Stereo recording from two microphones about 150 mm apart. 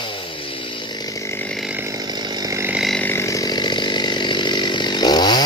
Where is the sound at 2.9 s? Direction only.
15° left (ahead or behind).